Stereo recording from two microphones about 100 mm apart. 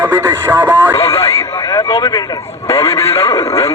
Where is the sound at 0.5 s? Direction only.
20° right (ahead or behind).